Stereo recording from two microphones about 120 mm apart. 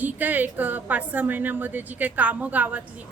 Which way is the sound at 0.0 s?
15° right (ahead or behind).